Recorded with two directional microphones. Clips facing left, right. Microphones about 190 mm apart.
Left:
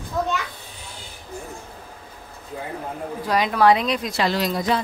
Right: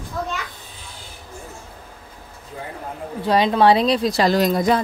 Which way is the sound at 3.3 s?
30° right (ahead or behind).